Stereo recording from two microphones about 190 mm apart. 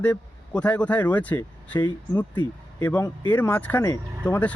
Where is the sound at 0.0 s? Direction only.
5° left (ahead or behind).